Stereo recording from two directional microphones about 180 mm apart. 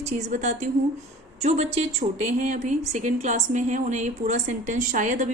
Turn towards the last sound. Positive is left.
turn(degrees=-45)  # may be behind; listen again after turning